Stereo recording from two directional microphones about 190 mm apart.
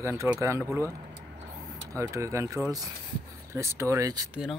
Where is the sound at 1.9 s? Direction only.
15° right (ahead or behind).